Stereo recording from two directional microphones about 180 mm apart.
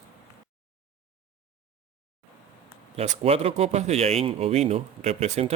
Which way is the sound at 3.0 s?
35° right (ahead or behind).